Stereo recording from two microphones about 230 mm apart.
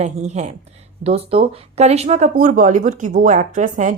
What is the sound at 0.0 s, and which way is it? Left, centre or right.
A woman's voice, right.